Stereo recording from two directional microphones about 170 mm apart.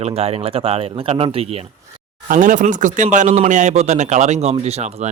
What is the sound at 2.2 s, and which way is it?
Speech, 50° right (ahead or behind).